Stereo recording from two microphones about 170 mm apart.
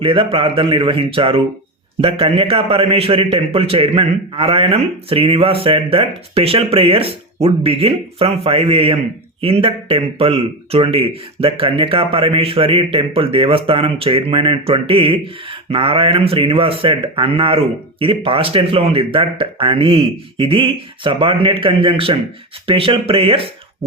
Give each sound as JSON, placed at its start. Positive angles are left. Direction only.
{"t": 0.0, "sound": "a man's voice", "side_deg": -30}